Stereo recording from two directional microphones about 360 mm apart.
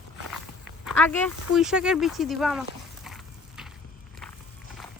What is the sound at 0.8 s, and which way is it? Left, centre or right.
Speech, centre.